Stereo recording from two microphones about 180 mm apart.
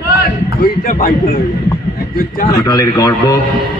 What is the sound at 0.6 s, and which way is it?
Speech, 50° left (ahead or behind).